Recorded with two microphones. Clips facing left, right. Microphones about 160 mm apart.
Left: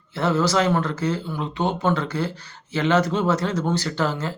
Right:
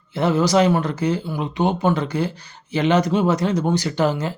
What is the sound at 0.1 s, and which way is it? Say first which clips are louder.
Speech: right 3 dB; 15° right (ahead or behind).